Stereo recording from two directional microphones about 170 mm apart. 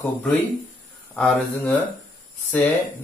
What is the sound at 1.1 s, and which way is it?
Music, 5° left (ahead or behind).